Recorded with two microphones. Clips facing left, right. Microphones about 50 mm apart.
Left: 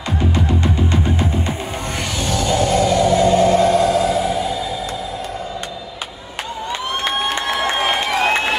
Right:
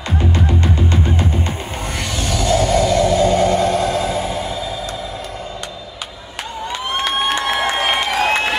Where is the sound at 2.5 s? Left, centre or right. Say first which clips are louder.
Right 1 dB; left.